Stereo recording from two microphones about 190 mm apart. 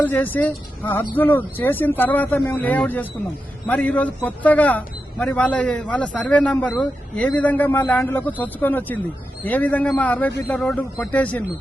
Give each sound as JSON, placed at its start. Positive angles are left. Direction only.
{"t": 0.0, "sound": "a man's voice", "side_deg": 10}